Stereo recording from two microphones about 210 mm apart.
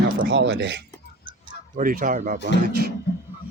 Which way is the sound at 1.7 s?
40° right (ahead or behind).